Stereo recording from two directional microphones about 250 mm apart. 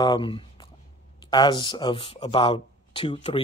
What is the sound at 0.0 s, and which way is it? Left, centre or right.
Speech, centre.